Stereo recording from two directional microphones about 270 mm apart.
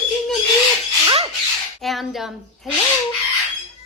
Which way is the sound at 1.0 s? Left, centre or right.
Right.